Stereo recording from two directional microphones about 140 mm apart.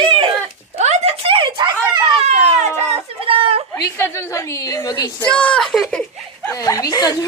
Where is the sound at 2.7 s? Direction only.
40° right (ahead or behind).